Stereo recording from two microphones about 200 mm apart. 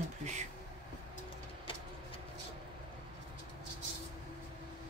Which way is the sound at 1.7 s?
25° left (ahead or behind).